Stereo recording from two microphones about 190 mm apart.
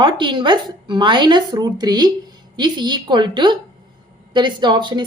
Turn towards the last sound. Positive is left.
turn(degrees=-25)  # may be behind; listen again after turning